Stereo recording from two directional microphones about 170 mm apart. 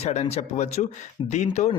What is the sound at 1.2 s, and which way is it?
Speech, 30° left (ahead or behind).